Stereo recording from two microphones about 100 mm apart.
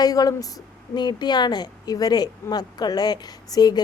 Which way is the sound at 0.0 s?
40° left (ahead or behind).